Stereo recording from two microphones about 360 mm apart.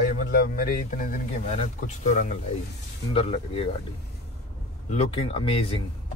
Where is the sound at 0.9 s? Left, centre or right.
Left.